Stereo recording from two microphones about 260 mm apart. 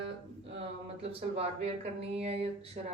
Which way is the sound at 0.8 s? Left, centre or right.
Right.